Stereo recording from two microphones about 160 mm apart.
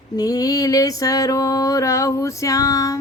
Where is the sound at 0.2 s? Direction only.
25° left (ahead or behind).